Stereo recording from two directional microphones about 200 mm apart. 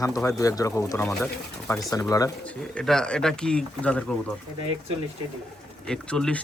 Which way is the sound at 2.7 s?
5° left (ahead or behind).